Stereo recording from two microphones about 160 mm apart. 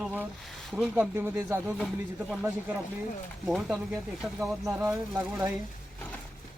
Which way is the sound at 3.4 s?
Centre (ahead or behind).